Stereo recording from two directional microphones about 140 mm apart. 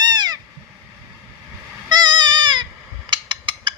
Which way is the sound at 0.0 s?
30° right (ahead or behind).